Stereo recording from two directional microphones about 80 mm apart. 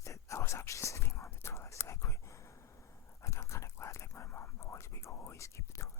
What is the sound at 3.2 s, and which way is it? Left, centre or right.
Dog, left.